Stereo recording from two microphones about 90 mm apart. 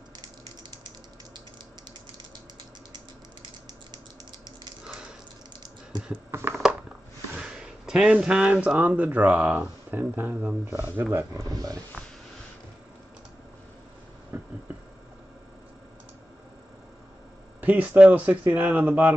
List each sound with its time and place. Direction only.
3.4 s mechanisms: 50° right (ahead or behind)
4.8 s a sound: 5° right (ahead or behind)
6.3 s speech: 30° right (ahead or behind)
7.3 s speech: 10° right (ahead or behind)
11.4 s speech: 45° right (ahead or behind)
14.3 s insect: 20° right (ahead or behind)
17.6 s speech: 15° right (ahead or behind)